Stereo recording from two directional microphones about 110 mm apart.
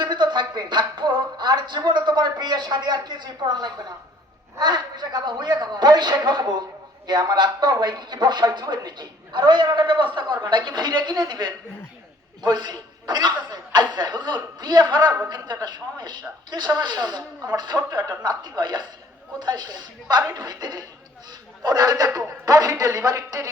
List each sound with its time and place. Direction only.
0.0 s a woman's voice: 45° right (ahead or behind)